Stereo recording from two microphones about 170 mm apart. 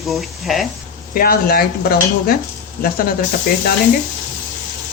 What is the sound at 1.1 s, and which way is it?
Stir, 60° left (ahead or behind).